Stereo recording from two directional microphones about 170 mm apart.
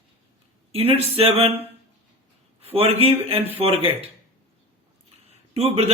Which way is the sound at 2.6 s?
35° right (ahead or behind).